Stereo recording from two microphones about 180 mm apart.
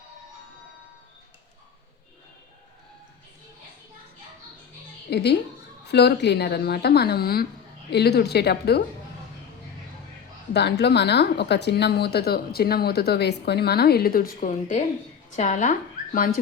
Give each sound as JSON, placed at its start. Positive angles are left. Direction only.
{"t": 5.1, "sound": "speech", "side_deg": 65}
{"t": 10.5, "sound": "speech", "side_deg": 65}